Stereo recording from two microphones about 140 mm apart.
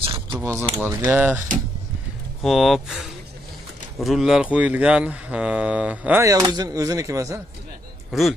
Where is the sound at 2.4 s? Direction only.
Centre (ahead or behind); by 7.4 s 20° right (ahead or behind).